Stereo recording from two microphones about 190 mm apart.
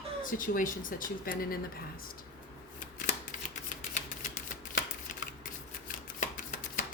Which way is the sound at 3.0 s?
40° left (ahead or behind).